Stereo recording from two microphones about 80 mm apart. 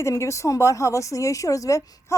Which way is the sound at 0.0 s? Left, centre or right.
Left.